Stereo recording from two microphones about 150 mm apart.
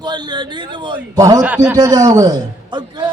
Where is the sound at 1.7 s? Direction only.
25° right (ahead or behind).